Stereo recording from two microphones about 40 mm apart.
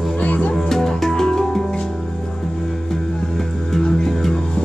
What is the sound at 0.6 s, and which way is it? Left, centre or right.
Music, centre.